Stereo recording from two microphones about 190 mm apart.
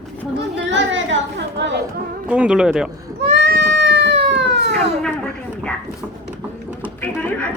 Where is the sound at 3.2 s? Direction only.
60° right (ahead or behind).